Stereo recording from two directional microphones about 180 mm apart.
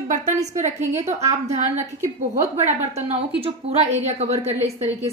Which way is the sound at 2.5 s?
40° right (ahead or behind).